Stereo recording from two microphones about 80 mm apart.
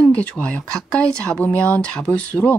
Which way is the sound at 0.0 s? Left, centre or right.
Centre.